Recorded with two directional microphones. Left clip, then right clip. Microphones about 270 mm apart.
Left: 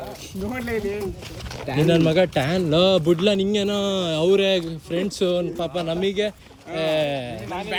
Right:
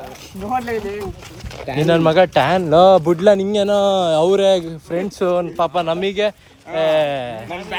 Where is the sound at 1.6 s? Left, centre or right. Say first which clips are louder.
Right 5 dB; centre.